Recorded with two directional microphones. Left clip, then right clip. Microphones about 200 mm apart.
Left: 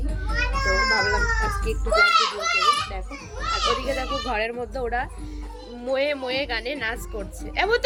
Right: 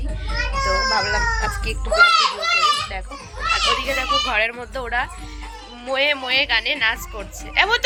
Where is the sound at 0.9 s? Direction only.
Centre (ahead or behind).